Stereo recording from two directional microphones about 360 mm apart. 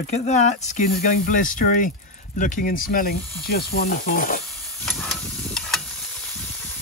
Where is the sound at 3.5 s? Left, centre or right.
Left.